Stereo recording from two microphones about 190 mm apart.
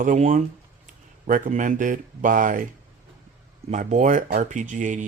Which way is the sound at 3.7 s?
40° right (ahead or behind).